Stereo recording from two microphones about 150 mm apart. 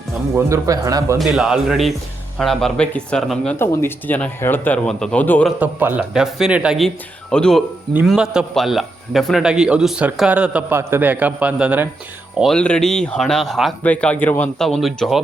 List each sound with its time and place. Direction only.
0.3 s a man's voice: 20° right (ahead or behind)
1.2 s a man's voice: centre (ahead or behind)
3.6 s speech: 15° left (ahead or behind)
5.5 s a man's voice: 10° right (ahead or behind)
12.4 s a man's voice: 5° left (ahead or behind)